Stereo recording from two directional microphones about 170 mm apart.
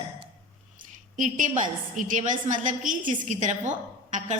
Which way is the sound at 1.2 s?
50° right (ahead or behind).